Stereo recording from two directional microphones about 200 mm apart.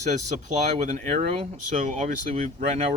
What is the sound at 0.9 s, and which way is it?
Speech, 35° right (ahead or behind).